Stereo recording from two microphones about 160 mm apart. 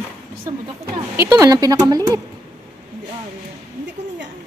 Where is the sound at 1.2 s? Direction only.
20° right (ahead or behind).